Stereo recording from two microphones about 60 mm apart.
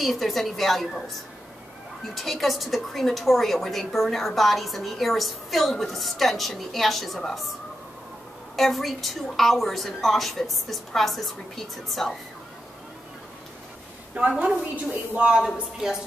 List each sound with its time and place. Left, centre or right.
0.0 s a woman's voice: centre
2.1 s a woman's voice: centre
8.5 s a woman's voice: centre
14.2 s a woman's voice: right